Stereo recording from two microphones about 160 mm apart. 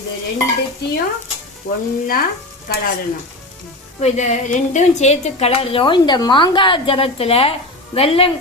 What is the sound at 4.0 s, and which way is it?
Speech, 45° left (ahead or behind).